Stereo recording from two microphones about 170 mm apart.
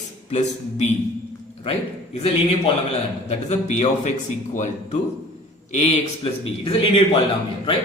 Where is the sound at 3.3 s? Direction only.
40° left (ahead or behind).